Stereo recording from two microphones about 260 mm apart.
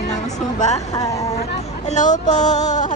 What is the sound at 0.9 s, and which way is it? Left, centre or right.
Speech, centre.